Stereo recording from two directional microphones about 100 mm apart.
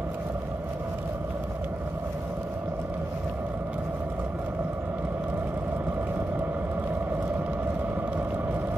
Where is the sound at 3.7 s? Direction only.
20° right (ahead or behind).